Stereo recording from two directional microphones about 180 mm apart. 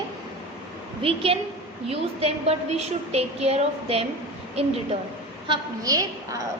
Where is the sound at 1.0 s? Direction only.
30° right (ahead or behind).